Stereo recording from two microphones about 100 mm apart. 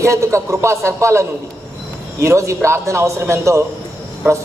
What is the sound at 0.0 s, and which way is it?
A man's voice, 30° right (ahead or behind).